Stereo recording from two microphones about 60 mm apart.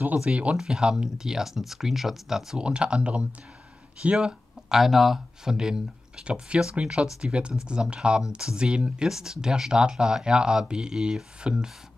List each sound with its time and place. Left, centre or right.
0.0 s speech: right; by 2.7 s centre
2.7 s speech: centre